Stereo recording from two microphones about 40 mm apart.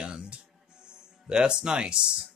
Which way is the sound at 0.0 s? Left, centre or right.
Right.